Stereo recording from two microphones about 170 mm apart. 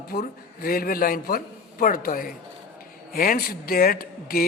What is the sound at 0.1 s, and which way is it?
Speech, 60° left (ahead or behind).